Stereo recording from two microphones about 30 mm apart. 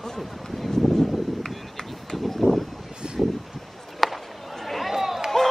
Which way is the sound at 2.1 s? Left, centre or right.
Centre.